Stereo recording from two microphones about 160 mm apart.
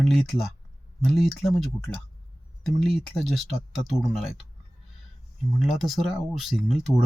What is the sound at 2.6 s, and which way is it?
Speech, centre (ahead or behind).